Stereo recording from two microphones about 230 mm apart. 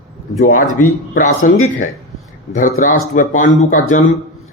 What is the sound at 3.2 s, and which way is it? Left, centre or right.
Speech, left.